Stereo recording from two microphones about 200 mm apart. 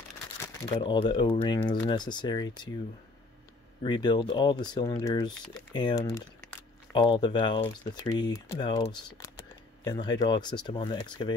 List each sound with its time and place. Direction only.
0.7 s speech: 25° left (ahead or behind)
3.8 s speech: 20° left (ahead or behind)